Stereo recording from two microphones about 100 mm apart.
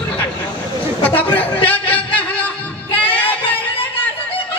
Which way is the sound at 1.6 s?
65° left (ahead or behind).